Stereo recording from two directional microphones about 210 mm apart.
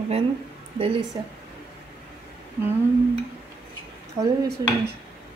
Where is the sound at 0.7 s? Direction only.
25° right (ahead or behind).